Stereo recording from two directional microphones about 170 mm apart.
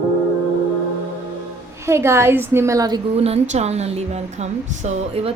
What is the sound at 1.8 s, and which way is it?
A woman's voice, 15° right (ahead or behind).